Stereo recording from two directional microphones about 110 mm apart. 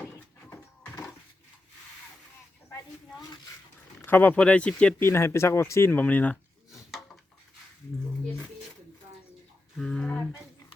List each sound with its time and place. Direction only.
4.0 s speech: 15° left (ahead or behind)
4.9 s speech: 25° left (ahead or behind)
9.7 s a sound: 5° left (ahead or behind)